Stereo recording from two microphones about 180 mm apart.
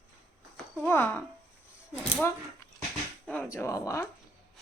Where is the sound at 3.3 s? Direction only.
10° left (ahead or behind).